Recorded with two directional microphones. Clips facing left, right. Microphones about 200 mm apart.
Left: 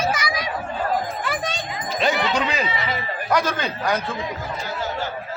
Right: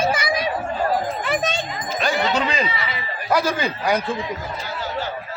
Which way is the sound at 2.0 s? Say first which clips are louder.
Left 2 dB; 25° left (ahead or behind).